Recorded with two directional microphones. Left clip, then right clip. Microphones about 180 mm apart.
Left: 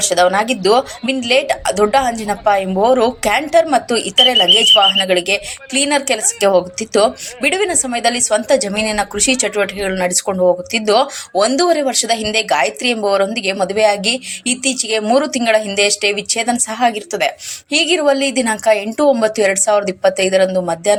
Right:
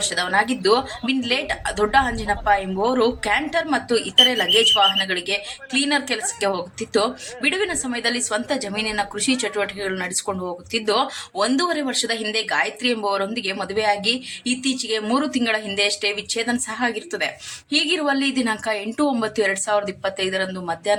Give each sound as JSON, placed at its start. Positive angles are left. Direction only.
{"t": 0.0, "sound": "a woman's voice", "side_deg": 15}